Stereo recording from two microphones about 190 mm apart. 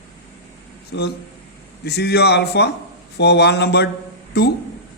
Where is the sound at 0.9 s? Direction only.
65° left (ahead or behind).